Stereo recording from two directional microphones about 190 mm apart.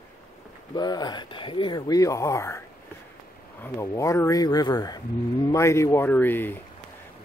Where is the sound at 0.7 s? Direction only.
20° left (ahead or behind).